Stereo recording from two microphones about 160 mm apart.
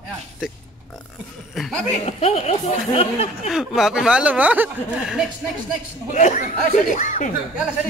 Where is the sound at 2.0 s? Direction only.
40° left (ahead or behind).